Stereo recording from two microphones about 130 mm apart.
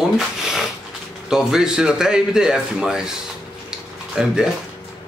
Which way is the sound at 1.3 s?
5° right (ahead or behind).